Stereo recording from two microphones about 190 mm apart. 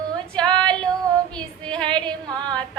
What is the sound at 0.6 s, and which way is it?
Female singing, 5° left (ahead or behind).